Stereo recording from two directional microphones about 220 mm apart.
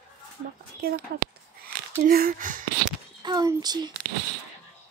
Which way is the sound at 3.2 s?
20° right (ahead or behind).